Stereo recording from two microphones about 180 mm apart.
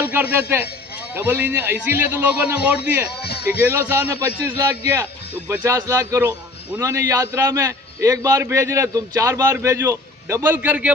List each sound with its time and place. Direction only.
0.1 s a man's voice: 10° right (ahead or behind)
3.2 s music: 65° left (ahead or behind)
3.6 s a man's voice: 10° right (ahead or behind)